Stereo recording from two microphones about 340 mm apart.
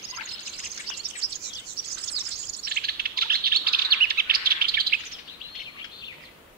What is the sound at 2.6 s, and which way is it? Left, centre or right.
Bird, right.